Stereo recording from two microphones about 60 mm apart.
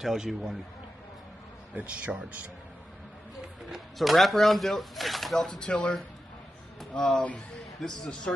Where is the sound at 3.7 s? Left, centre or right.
Centre.